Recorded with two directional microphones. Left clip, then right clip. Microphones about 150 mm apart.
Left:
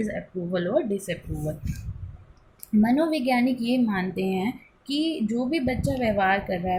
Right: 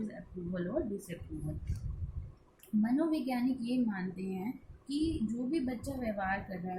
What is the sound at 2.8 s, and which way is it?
A woman's voice, 30° left (ahead or behind).